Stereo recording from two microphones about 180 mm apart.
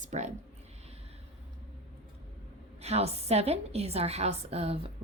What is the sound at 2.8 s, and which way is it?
A woman's voice, 35° right (ahead or behind).